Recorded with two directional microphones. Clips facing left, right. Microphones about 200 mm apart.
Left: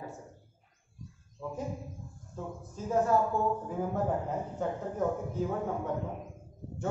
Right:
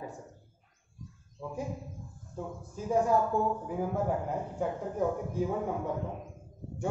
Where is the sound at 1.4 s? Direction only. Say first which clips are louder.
Left 1 dB; 10° right (ahead or behind).